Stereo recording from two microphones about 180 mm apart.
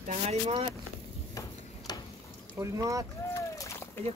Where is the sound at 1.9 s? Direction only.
20° left (ahead or behind).